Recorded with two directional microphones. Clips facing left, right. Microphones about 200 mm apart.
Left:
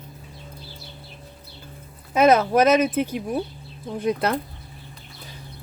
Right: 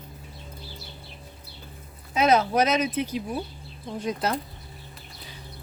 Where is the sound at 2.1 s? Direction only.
50° left (ahead or behind).